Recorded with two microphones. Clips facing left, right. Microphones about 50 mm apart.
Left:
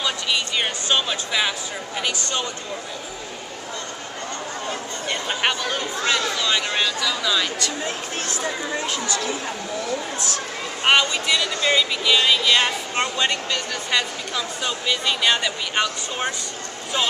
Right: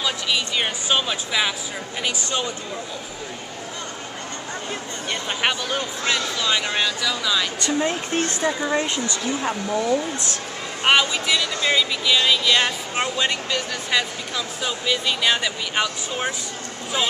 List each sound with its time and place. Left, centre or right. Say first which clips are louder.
0.0 s speech: even; centre
5.1 s speech: even; centre
7.6 s speech: right 4 dB; right
10.8 s speech: even; centre